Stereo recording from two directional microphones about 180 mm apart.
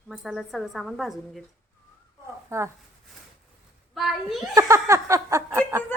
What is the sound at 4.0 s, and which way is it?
Speech, centre (ahead or behind).